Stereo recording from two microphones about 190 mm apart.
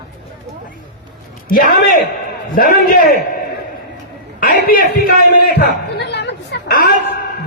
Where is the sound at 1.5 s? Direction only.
50° left (ahead or behind).